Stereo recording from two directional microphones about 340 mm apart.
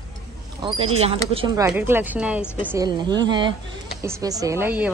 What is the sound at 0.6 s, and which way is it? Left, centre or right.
Speech, centre.